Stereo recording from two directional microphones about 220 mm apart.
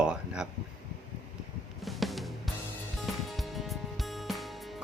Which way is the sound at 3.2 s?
Centre (ahead or behind).